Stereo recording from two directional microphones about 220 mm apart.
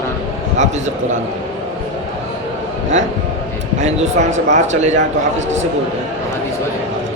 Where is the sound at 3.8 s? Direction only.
30° right (ahead or behind).